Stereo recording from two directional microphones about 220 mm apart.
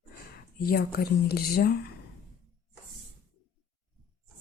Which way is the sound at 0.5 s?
45° left (ahead or behind).